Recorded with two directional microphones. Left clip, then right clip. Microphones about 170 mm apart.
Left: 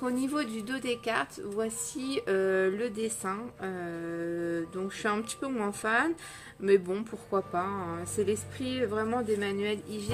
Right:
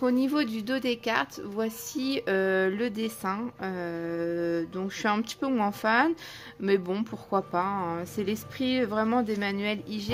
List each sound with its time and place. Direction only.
0.0 s a woman's voice: 35° right (ahead or behind)